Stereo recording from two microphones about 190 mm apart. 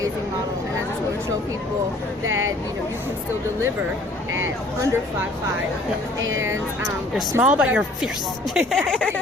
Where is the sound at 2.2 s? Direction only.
90° right.